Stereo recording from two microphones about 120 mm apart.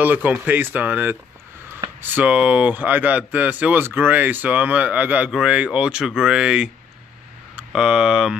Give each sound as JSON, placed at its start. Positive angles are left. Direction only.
{"t": 0.0, "sound": "speech", "side_deg": -15}